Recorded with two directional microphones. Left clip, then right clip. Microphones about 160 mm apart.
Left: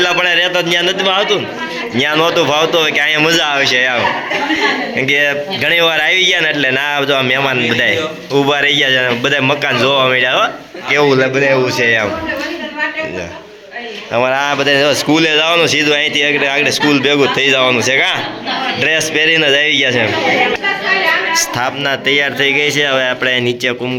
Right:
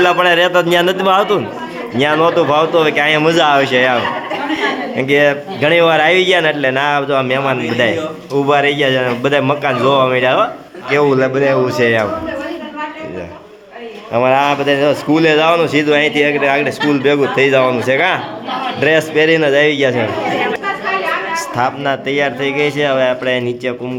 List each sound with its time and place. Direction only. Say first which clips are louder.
0.0 s a man's voice: right 1 dB; 20° right (ahead or behind)
0.3 s a man's voice: right 2 dB; 45° right (ahead or behind)
2.0 s speech: right 1 dB; 10° right (ahead or behind)
11.3 s speech: left 1 dB; 35° right (ahead or behind)
14.1 s speech: right 2 dB; 5° right (ahead or behind)
21.6 s speech: left 1 dB; 15° right (ahead or behind)